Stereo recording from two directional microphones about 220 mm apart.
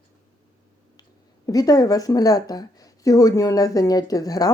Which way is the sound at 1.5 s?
15° left (ahead or behind).